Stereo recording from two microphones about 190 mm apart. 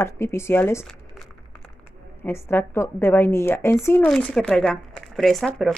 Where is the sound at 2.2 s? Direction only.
10° left (ahead or behind).